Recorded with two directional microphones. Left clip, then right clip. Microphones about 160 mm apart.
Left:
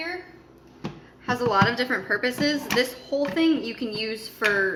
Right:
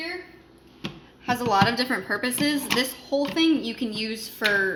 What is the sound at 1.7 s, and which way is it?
Speech, 50° right (ahead or behind).